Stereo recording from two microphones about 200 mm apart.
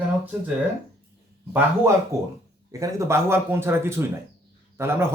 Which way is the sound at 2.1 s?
15° right (ahead or behind).